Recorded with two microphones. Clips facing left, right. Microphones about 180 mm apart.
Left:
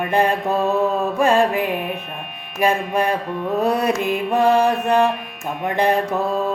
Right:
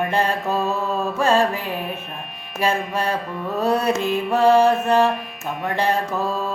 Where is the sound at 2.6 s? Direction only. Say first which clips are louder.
Left 3 dB; 15° left (ahead or behind).